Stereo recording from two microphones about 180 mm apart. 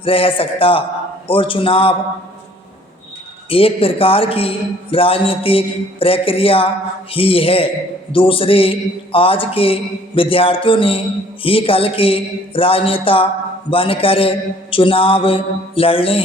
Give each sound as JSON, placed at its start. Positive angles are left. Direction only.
{"t": 0.0, "sound": "a man's voice", "side_deg": 30}
{"t": 3.5, "sound": "a man's voice", "side_deg": 30}